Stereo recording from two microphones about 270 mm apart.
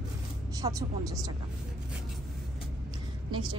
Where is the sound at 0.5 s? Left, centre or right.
Centre.